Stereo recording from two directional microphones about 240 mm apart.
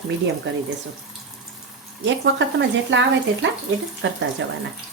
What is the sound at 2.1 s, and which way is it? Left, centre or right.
Speech, right.